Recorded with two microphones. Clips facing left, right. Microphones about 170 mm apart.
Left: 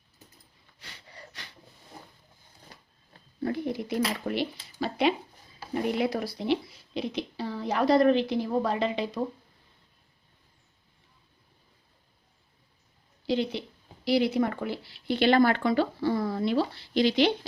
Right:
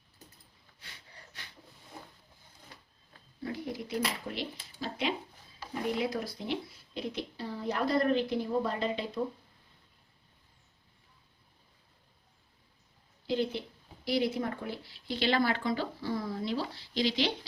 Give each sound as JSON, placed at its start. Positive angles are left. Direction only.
{"t": 0.8, "sound": "a sound", "side_deg": 80}
{"t": 3.4, "sound": "a woman's voice", "side_deg": 60}
{"t": 13.2, "sound": "speech", "side_deg": 85}